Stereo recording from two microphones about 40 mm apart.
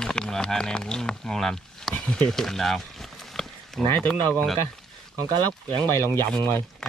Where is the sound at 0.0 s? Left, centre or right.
Centre.